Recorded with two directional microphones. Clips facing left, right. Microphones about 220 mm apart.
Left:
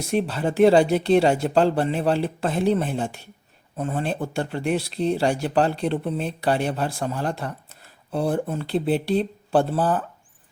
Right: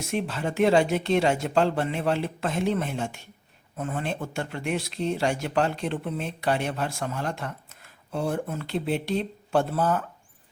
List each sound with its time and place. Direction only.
0.1 s speech: 35° left (ahead or behind)